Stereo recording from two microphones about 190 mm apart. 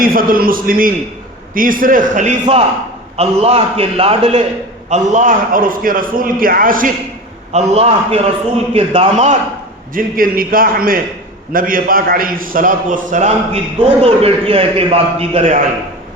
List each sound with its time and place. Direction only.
0.0 s a man's voice: 50° right (ahead or behind)
7.5 s a man's voice: 35° right (ahead or behind)
9.9 s a man's voice: 50° right (ahead or behind); by 15.5 s 30° right (ahead or behind)